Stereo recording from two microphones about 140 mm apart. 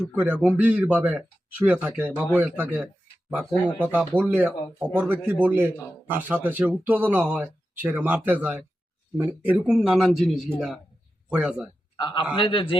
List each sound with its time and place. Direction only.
0.1 s speech: 10° right (ahead or behind)
11.9 s a man's voice: 30° left (ahead or behind)